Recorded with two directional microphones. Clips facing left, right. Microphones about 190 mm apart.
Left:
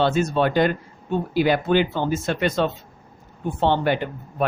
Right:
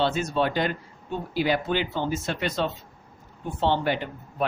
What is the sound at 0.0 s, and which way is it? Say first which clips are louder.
Speech: left 4 dB; 50° left (ahead or behind).